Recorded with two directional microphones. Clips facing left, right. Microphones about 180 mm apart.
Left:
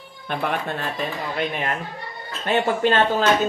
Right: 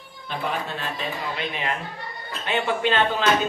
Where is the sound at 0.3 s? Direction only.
55° left (ahead or behind).